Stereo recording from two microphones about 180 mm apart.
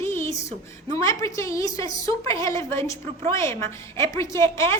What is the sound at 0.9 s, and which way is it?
A woman's voice, 15° left (ahead or behind).